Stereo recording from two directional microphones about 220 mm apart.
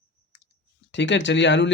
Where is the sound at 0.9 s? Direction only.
55° left (ahead or behind).